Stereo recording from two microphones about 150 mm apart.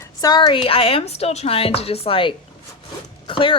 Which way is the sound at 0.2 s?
25° left (ahead or behind).